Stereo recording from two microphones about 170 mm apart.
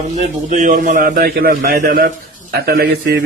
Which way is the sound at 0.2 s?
45° right (ahead or behind).